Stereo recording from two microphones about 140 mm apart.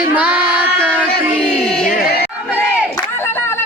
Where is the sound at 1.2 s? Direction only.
15° right (ahead or behind).